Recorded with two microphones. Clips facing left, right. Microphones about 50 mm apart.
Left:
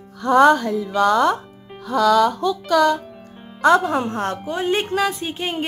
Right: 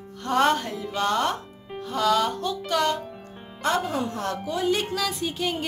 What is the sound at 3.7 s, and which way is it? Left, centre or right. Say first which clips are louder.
Speech: left 9 dB; left.